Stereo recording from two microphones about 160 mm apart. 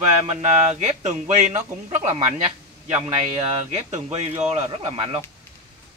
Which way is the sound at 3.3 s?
40° right (ahead or behind).